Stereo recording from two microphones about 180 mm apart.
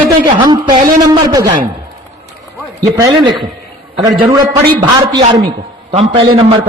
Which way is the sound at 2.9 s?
20° right (ahead or behind).